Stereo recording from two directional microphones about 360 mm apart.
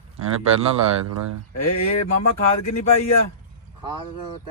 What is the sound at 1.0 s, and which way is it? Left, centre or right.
Speech, right.